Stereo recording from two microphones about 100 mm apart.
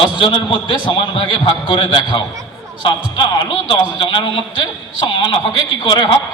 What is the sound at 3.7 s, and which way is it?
A man's voice, 50° left (ahead or behind).